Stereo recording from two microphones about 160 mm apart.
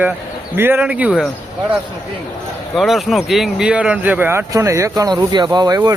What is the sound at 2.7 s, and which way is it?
Speech, centre (ahead or behind).